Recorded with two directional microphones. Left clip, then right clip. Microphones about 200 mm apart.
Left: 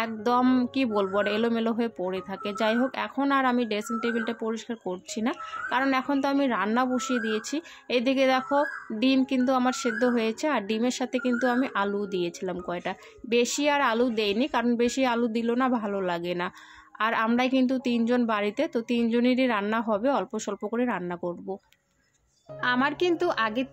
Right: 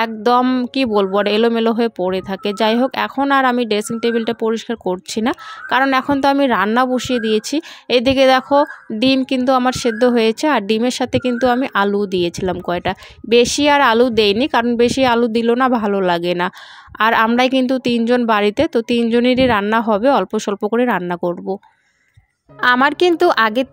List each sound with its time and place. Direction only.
0.0 s speech: 45° right (ahead or behind)
22.6 s speech: 50° right (ahead or behind)